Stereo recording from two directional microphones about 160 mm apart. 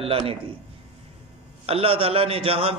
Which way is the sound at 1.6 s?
35° right (ahead or behind).